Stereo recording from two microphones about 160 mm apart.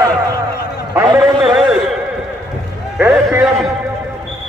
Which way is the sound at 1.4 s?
5° right (ahead or behind).